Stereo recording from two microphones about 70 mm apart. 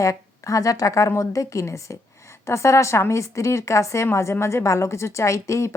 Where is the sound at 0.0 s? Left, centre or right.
Left.